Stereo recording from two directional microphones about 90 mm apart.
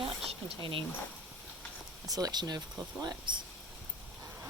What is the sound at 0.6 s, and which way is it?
Speech, 70° right (ahead or behind).